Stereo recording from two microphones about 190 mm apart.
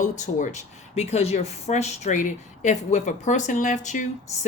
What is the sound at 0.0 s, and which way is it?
Speech, 40° left (ahead or behind).